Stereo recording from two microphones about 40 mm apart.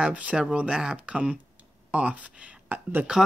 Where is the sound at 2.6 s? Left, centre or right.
Right.